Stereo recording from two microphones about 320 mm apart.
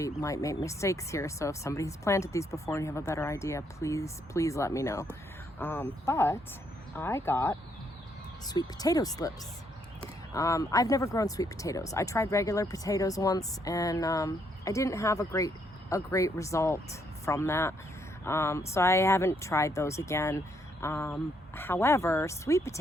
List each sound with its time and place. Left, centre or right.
0.0 s speech: centre
10.3 s speech: centre